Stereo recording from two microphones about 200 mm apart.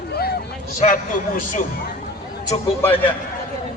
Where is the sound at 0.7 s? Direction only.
40° left (ahead or behind).